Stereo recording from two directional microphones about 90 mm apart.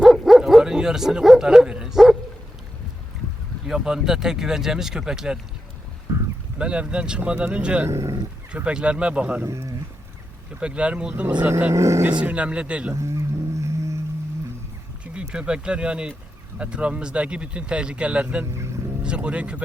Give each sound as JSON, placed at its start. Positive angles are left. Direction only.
{"t": 0.0, "sound": "bow-wow", "side_deg": -5}
{"t": 3.7, "sound": "speech", "side_deg": -5}
{"t": 6.1, "sound": "boat", "side_deg": -25}
{"t": 6.6, "sound": "speech", "side_deg": -10}
{"t": 7.9, "sound": "speech", "side_deg": -35}
{"t": 8.5, "sound": "speech", "side_deg": -10}
{"t": 9.4, "sound": "speech", "side_deg": -35}
{"t": 10.6, "sound": "speech", "side_deg": -10}
{"t": 11.7, "sound": "speech", "side_deg": -35}
{"t": 12.2, "sound": "speech", "side_deg": -15}
{"t": 12.9, "sound": "speech", "side_deg": -30}
{"t": 15.0, "sound": "speech", "side_deg": -10}